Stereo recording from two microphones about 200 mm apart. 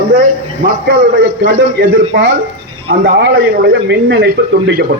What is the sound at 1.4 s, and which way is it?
Speech, 50° right (ahead or behind).